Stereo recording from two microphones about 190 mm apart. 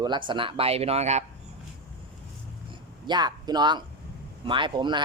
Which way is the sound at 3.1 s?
20° right (ahead or behind).